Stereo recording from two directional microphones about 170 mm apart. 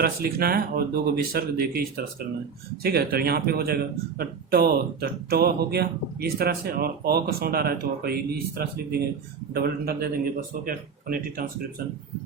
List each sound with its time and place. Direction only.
0.0 s speech: 65° right (ahead or behind)